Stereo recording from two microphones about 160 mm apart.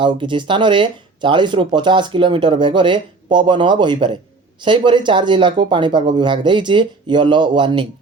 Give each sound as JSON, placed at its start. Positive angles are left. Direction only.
{"t": 0.0, "sound": "speech", "side_deg": -30}